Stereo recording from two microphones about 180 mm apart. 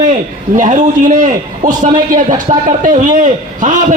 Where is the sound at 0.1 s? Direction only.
45° right (ahead or behind).